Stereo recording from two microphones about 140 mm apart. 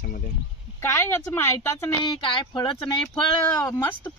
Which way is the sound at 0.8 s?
15° left (ahead or behind).